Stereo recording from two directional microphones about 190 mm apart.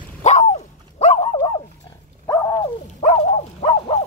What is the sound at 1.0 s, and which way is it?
Dog, 35° left (ahead or behind).